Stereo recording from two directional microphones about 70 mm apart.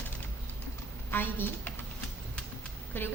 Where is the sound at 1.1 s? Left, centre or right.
Left.